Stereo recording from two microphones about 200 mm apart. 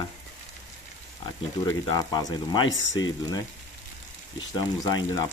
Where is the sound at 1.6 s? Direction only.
20° left (ahead or behind).